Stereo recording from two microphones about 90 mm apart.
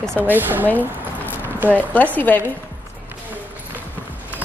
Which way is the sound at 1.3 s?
20° right (ahead or behind).